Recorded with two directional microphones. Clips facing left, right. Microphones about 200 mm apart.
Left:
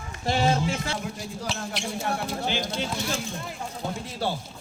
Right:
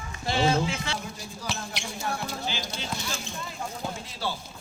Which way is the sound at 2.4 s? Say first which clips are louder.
Left 5 dB; 55° left (ahead or behind).